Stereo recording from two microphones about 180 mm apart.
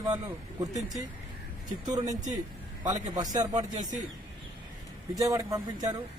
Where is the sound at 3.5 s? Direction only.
40° right (ahead or behind).